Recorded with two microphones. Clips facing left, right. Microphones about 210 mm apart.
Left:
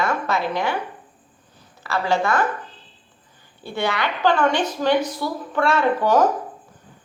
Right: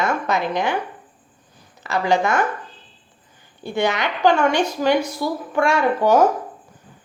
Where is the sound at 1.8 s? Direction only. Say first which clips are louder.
Right 2 dB; 15° right (ahead or behind).